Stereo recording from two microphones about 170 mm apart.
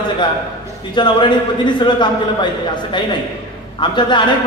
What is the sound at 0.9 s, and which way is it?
A man's voice, 25° left (ahead or behind).